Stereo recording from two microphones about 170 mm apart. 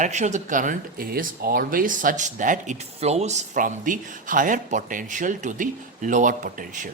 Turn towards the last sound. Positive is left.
turn(degrees=-50)  # may be behind; listen again after turning